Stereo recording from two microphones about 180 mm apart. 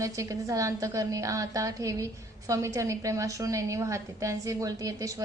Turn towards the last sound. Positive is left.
turn(degrees=-20)  # may be behind; listen again after turning